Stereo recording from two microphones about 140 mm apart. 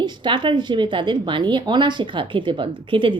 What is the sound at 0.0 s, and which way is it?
A woman's voice, 35° right (ahead or behind).